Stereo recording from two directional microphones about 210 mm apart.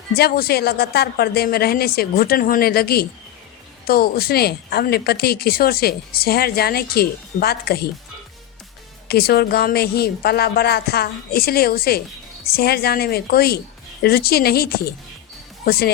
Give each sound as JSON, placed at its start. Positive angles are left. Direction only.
{"t": 0.2, "sound": "a woman's voice", "side_deg": 45}
{"t": 9.0, "sound": "a woman's voice", "side_deg": 50}